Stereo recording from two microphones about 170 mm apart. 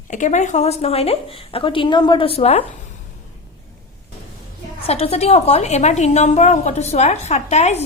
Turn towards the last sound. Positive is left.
turn(degrees=40)  # may be behind; listen again after turning